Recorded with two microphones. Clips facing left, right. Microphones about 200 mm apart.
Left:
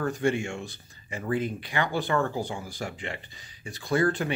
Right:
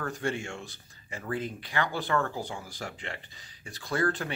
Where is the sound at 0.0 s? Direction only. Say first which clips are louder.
Left 6 dB; 15° left (ahead or behind).